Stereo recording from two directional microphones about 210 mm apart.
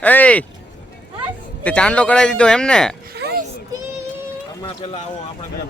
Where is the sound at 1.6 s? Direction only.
5° left (ahead or behind).